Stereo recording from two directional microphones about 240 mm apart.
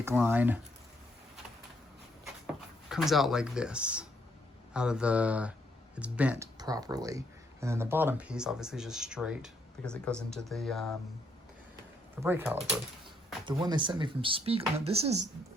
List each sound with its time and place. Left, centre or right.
0.0 s speech: centre
2.9 s speech: centre
12.2 s speech: centre